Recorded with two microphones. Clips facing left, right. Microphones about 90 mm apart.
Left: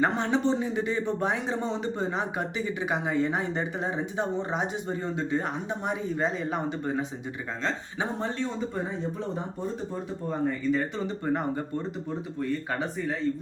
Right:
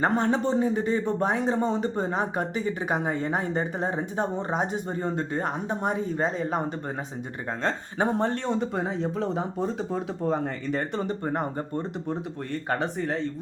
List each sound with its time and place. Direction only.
0.0 s speech: 40° right (ahead or behind)
7.6 s speech: 50° right (ahead or behind); by 8.9 s 70° right (ahead or behind)
9.6 s speech: 85° right
10.4 s speech: 55° right (ahead or behind)
12.0 s speech: 60° right (ahead or behind)